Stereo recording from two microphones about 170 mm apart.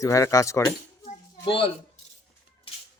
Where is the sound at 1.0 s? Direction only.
30° left (ahead or behind).